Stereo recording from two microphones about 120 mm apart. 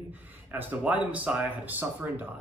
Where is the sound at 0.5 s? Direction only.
15° right (ahead or behind).